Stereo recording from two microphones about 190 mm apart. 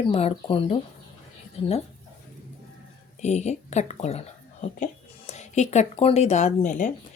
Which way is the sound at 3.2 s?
35° left (ahead or behind).